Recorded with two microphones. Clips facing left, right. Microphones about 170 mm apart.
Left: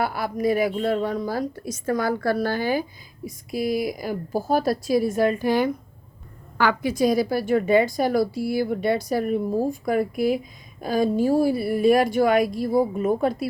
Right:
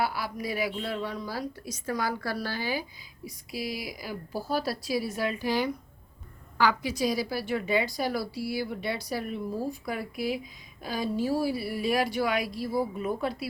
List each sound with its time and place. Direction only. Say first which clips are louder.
0.0 s a woman's voice: left 7 dB; 50° left (ahead or behind)